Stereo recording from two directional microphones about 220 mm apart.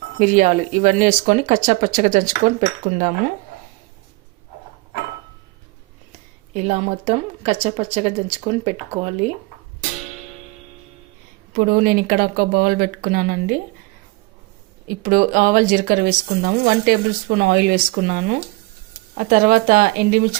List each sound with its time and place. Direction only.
0.2 s speech: 35° right (ahead or behind)
6.5 s a woman's voice: 30° right (ahead or behind)
11.5 s speech: 40° right (ahead or behind)
15.0 s speech: 35° right (ahead or behind)